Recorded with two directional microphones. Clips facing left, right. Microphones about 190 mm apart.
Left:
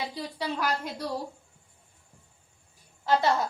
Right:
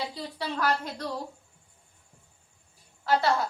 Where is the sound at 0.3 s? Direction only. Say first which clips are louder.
Right 2 dB; 15° left (ahead or behind).